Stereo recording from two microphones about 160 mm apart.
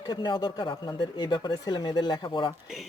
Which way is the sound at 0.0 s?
25° left (ahead or behind).